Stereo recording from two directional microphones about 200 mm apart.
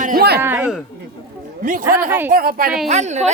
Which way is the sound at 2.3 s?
45° right (ahead or behind).